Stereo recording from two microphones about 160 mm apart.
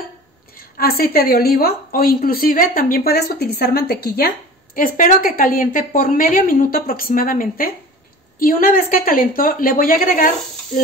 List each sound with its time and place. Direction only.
0.7 s a woman's voice: 70° left (ahead or behind)
4.7 s a woman's voice: 60° left (ahead or behind)